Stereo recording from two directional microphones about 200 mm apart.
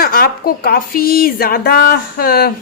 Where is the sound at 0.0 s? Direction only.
50° left (ahead or behind).